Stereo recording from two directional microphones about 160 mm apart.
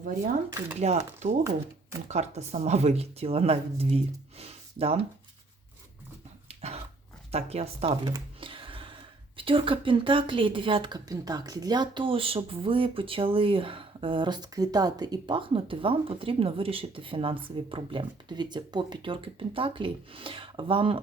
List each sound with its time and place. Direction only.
0.8 s speech: 45° right (ahead or behind)
6.5 s dog: 40° right (ahead or behind)
7.3 s speech: 40° right (ahead or behind)
8.0 s a sound: 30° right (ahead or behind)
9.4 s speech: 35° right (ahead or behind)